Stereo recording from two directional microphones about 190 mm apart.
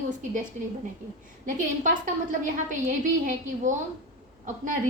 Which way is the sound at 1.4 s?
45° right (ahead or behind).